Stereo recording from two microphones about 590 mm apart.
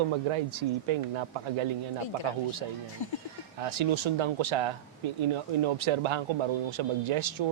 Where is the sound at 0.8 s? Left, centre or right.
Right.